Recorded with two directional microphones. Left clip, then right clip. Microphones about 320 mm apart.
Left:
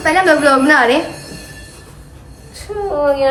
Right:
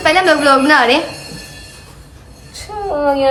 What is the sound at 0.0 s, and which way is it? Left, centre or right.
Speech, centre.